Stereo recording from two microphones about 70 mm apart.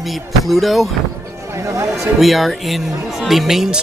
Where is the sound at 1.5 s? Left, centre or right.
Right.